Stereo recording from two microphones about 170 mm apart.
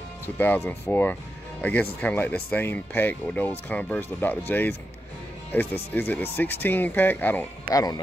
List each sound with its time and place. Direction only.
0.4 s speech: 10° left (ahead or behind)
7.7 s speech: 20° left (ahead or behind)